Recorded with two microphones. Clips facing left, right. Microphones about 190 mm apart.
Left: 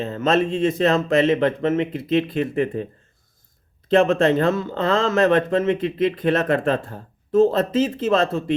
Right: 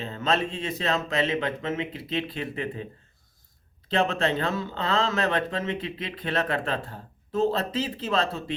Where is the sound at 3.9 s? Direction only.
50° left (ahead or behind).